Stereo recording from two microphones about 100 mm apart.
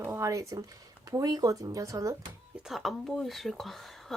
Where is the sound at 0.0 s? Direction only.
30° right (ahead or behind).